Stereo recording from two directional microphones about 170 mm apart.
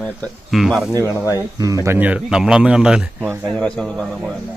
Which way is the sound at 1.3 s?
20° right (ahead or behind).